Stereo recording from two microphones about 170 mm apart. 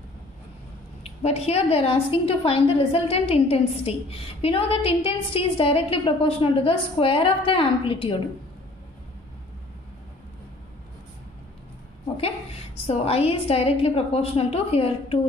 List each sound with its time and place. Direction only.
1.0 s a woman's voice: 40° left (ahead or behind)
12.8 s a woman's voice: 35° left (ahead or behind)